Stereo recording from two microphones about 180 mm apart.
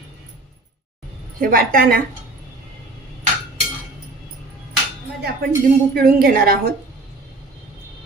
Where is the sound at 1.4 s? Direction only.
55° right (ahead or behind).